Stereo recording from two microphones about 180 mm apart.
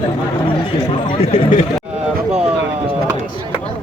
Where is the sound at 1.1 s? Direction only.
35° left (ahead or behind).